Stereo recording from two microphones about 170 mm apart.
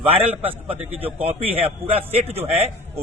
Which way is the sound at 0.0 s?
35° right (ahead or behind).